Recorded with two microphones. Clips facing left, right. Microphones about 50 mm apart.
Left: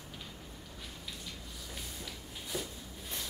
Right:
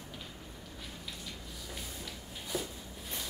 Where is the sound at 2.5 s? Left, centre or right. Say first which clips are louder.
Right 2 dB; centre.